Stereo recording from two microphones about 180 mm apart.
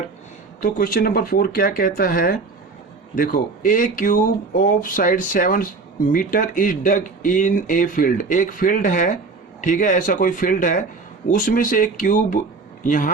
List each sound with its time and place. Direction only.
0.6 s speech: 55° left (ahead or behind)